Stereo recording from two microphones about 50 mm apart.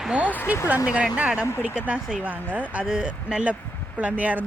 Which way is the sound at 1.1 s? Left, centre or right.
Right.